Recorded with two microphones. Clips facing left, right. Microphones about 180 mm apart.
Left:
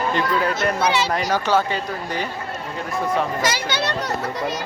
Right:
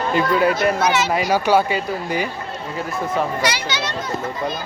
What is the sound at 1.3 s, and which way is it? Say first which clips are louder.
Speech: right 5 dB; 10° right (ahead or behind).